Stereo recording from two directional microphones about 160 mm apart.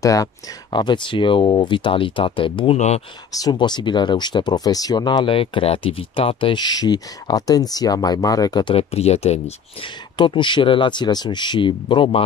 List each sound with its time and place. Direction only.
0.0 s speech: 20° left (ahead or behind); by 3.0 s 40° left (ahead or behind)
3.3 s speech: 25° left (ahead or behind)